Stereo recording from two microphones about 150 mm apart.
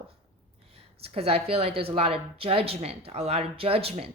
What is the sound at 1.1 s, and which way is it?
Speech, 40° right (ahead or behind).